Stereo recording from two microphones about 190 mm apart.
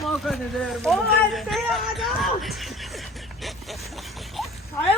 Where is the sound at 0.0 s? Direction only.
Centre (ahead or behind).